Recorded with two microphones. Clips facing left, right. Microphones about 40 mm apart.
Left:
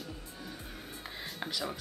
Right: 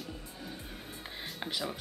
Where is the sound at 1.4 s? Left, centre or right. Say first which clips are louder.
Even; centre.